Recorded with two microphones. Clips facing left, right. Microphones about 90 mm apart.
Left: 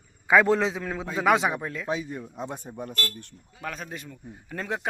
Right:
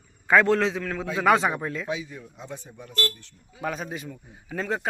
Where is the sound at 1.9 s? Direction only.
45° left (ahead or behind).